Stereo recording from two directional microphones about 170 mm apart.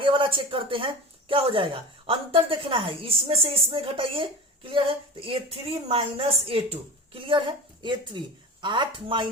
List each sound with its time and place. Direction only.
0.0 s a woman's voice: 30° right (ahead or behind)